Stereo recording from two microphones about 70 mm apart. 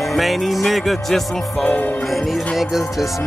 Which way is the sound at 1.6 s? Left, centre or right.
Left.